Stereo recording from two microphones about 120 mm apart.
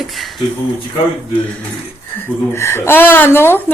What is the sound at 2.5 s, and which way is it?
Speech, 20° left (ahead or behind).